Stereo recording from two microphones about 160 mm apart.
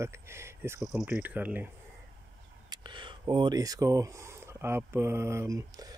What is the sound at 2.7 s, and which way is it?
Speech, 30° right (ahead or behind).